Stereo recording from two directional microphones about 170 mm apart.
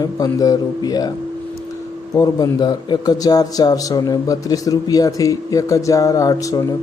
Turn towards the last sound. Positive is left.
turn(degrees=20)  # may be behind; listen again after turning